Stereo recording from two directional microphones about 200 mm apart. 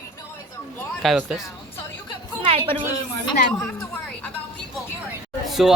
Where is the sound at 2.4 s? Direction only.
30° right (ahead or behind).